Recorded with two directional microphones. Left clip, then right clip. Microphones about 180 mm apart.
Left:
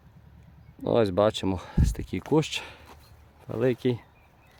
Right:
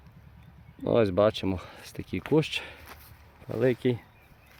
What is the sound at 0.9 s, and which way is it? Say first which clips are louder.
Speech: even; 5° left (ahead or behind).